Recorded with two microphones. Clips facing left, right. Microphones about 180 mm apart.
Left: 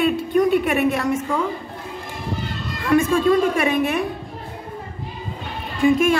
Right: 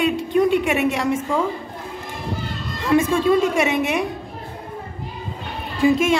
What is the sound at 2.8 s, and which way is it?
Speech, 20° right (ahead or behind).